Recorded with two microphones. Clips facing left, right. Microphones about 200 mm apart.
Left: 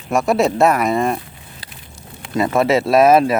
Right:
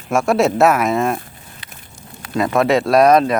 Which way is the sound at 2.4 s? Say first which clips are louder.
Even; 5° left (ahead or behind).